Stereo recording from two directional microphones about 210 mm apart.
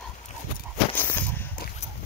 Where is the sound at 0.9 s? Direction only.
10° left (ahead or behind).